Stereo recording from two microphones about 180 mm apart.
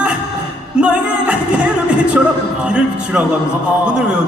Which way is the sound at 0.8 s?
5° right (ahead or behind).